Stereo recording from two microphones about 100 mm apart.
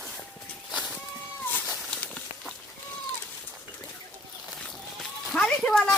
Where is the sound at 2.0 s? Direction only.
10° left (ahead or behind).